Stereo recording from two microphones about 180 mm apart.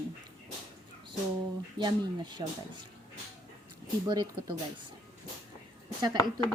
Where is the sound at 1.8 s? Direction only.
25° right (ahead or behind).